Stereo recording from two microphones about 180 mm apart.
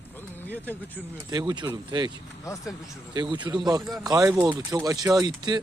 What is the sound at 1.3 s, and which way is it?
Speech, 25° right (ahead or behind).